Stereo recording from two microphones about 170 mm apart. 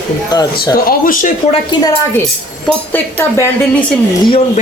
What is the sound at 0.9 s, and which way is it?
Speech, 55° left (ahead or behind).